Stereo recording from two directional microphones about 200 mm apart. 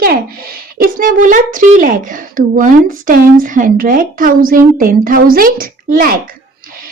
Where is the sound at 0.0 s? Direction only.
50° right (ahead or behind).